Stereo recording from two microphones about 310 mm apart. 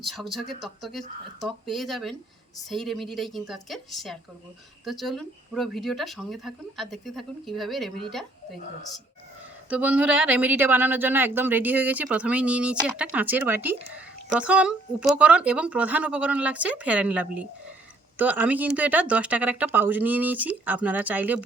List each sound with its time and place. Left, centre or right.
0.0 s speech: centre
9.6 s speech: centre